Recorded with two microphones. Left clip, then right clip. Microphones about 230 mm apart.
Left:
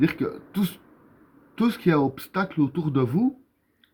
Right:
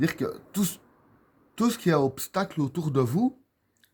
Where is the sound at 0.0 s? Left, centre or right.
Right.